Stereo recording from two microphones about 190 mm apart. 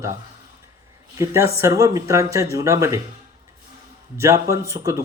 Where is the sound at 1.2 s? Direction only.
15° right (ahead or behind).